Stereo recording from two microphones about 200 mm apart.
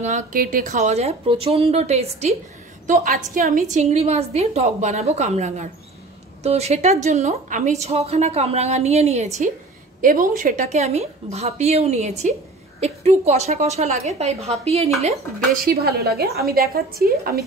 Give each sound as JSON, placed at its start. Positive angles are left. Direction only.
{"t": 0.0, "sound": "a woman's voice", "side_deg": -40}
{"t": 15.5, "sound": "a woman's voice", "side_deg": -50}